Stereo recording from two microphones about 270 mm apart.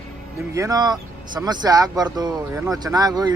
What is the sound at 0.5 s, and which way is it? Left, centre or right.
Speech, centre.